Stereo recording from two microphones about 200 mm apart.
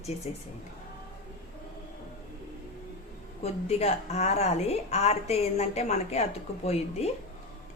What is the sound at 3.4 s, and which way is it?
A woman's voice, 30° left (ahead or behind).